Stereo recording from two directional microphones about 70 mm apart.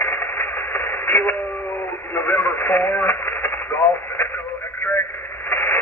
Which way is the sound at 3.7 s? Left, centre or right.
Left.